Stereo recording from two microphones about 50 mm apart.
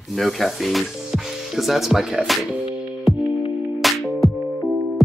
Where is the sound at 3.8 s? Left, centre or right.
Centre.